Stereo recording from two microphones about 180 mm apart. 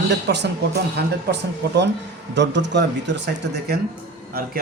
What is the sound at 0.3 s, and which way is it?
Speech, 70° right (ahead or behind).